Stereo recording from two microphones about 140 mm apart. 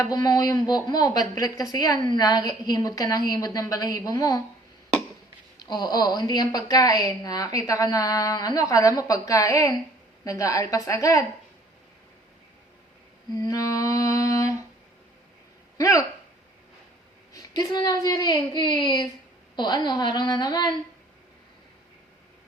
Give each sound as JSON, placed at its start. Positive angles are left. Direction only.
{"t": 0.0, "sound": "a woman's voice", "side_deg": 25}
{"t": 5.5, "sound": "a woman's voice", "side_deg": 30}
{"t": 13.3, "sound": "a sound", "side_deg": 25}
{"t": 15.8, "sound": "a woman's voice", "side_deg": 25}
{"t": 17.3, "sound": "a woman's voice", "side_deg": 30}